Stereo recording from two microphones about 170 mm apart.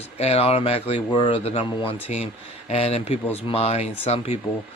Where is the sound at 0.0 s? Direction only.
35° left (ahead or behind).